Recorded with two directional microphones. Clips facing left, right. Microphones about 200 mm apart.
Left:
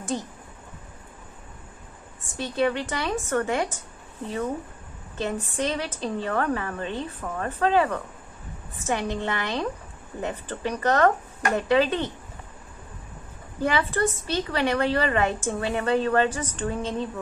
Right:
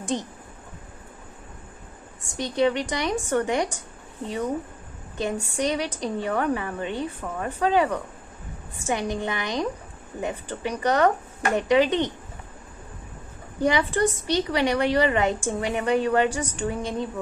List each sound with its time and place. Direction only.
0.1 s speech: 20° right (ahead or behind)
2.3 s a woman's voice: 15° right (ahead or behind)
5.1 s a woman's voice: 15° right (ahead or behind)
13.6 s a woman's voice: 15° right (ahead or behind)